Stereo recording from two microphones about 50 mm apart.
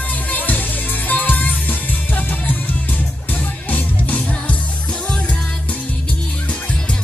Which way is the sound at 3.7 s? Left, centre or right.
Left.